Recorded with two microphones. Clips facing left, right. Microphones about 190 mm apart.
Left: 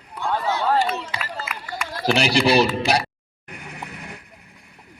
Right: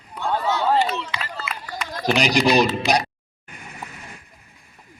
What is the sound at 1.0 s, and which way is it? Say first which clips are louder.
Run: even; 45° left (ahead or behind).